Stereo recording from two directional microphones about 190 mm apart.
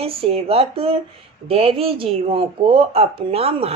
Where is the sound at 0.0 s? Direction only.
30° right (ahead or behind).